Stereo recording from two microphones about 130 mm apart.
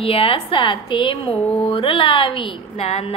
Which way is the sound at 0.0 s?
45° left (ahead or behind).